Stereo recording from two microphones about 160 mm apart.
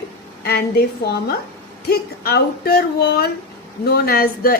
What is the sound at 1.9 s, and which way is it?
A woman's voice, 80° left.